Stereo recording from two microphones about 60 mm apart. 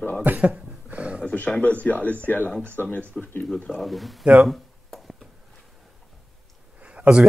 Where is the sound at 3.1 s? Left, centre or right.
Left.